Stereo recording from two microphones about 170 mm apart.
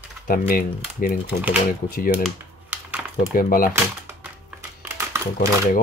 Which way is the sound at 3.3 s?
55° left (ahead or behind).